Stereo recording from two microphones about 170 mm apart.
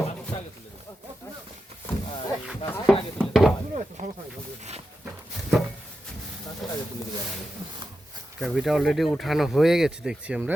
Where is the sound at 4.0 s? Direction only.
45° right (ahead or behind).